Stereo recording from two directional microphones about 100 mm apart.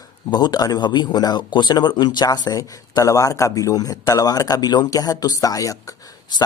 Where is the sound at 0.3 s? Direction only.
45° left (ahead or behind).